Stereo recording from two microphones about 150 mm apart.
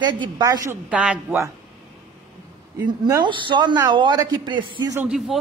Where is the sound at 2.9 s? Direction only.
30° right (ahead or behind).